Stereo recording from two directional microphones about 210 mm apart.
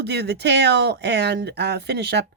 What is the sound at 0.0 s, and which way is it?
Speech, 50° right (ahead or behind).